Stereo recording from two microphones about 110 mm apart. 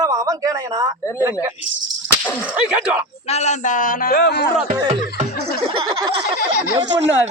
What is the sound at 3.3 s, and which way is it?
Speech, 90° left.